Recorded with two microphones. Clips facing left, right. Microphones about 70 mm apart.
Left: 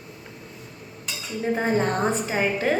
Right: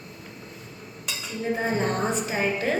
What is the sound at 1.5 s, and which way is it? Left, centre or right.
A woman's voice, left.